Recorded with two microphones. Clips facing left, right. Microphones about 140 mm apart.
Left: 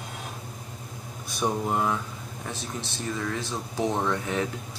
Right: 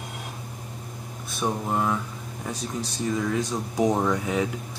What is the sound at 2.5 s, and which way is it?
Speech, 40° right (ahead or behind).